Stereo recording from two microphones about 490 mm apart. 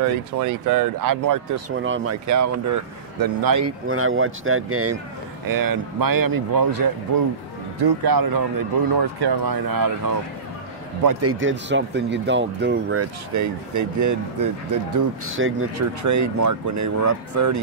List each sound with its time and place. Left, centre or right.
0.0 s speech: right
1.8 s speech: right
2.2 s speech: right
3.6 s speech: right
5.5 s speech: right
11.1 s speech: right
15.2 s speech: right